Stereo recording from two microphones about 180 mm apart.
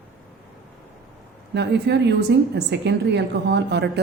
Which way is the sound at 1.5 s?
70° right (ahead or behind).